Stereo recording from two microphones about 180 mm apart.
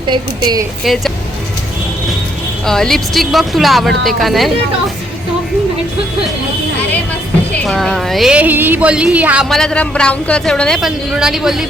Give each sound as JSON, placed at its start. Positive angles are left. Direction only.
{"t": 0.1, "sound": "speech", "side_deg": -20}
{"t": 2.6, "sound": "a woman's voice", "side_deg": 5}
{"t": 7.5, "sound": "a woman's voice", "side_deg": 5}